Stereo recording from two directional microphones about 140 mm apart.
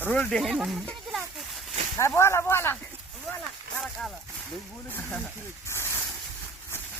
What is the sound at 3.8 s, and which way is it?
Speech, centre (ahead or behind).